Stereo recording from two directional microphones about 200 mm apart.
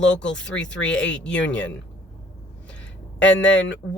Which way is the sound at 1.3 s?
65° left (ahead or behind).